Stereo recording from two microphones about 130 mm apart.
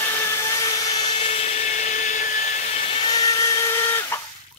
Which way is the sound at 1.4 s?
55° left (ahead or behind).